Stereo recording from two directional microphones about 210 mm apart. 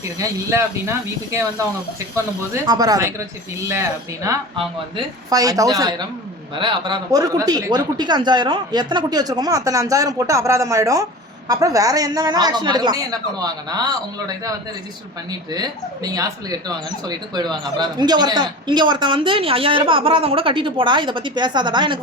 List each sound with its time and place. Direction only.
0.2 s speech: 15° right (ahead or behind)
15.3 s speech: 20° right (ahead or behind)